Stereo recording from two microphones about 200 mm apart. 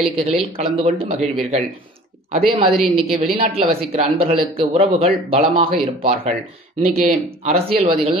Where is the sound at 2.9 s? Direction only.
30° right (ahead or behind).